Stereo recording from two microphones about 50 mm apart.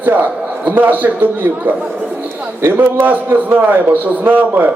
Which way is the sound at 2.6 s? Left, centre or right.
Right.